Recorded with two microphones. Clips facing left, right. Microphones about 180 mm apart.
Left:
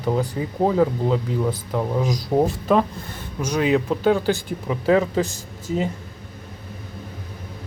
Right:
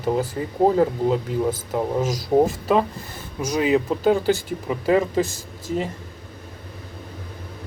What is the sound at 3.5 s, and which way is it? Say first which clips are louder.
Speech: even; 5° right (ahead or behind).